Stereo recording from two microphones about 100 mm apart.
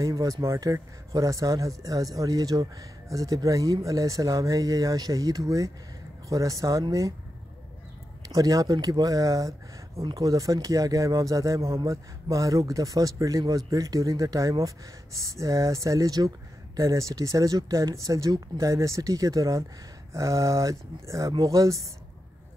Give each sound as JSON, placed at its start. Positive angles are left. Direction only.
{"t": 0.0, "sound": "speech", "side_deg": -35}
{"t": 8.3, "sound": "speech", "side_deg": -35}